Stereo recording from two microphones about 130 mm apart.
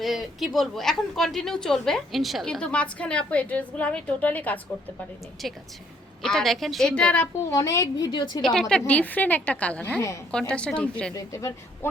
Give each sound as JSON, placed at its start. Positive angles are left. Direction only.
{"t": 0.0, "sound": "a woman's voice", "side_deg": 0}
{"t": 5.4, "sound": "a woman's voice", "side_deg": 0}
{"t": 7.5, "sound": "a woman's voice", "side_deg": 25}
{"t": 8.9, "sound": "a woman's voice", "side_deg": 10}
{"t": 11.1, "sound": "a woman's voice", "side_deg": 25}